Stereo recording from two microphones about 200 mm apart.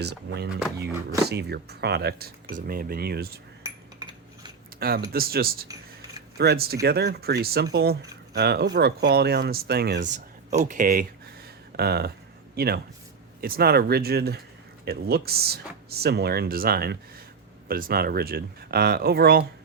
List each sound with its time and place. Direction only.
0.0 s speech: 55° right (ahead or behind)
3.6 s cutlery: 20° right (ahead or behind)
4.8 s speech: 50° right (ahead or behind)
10.5 s a man's voice: 40° right (ahead or behind)